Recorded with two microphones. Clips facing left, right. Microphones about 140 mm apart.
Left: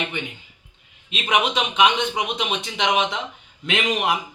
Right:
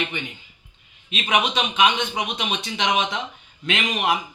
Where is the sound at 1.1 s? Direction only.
20° left (ahead or behind).